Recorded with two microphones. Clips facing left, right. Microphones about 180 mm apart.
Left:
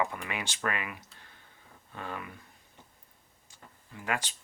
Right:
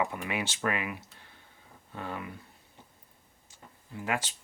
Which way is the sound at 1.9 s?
15° right (ahead or behind).